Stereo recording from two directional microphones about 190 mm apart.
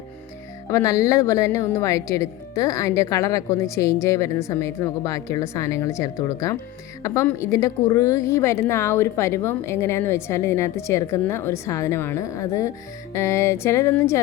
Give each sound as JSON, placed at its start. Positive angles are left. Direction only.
{"t": 0.7, "sound": "speech", "side_deg": 15}